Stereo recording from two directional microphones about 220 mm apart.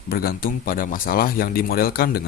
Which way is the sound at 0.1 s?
45° left (ahead or behind).